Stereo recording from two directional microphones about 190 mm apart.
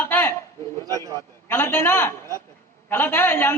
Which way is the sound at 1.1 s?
10° left (ahead or behind).